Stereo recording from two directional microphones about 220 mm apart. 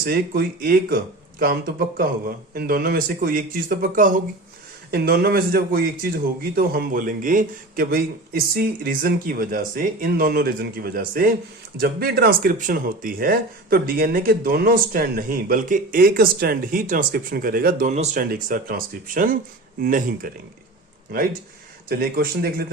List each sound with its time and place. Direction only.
0.0 s speech: 45° right (ahead or behind)
21.8 s speech: 40° right (ahead or behind)